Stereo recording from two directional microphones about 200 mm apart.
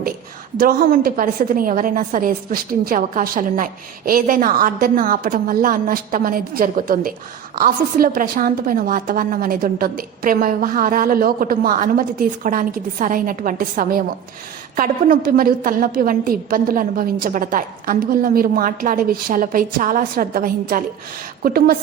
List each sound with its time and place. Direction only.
0.5 s a woman's voice: 50° right (ahead or behind)